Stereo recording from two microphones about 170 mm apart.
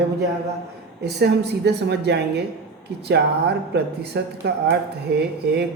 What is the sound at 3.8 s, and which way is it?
A woman's voice, 75° right (ahead or behind).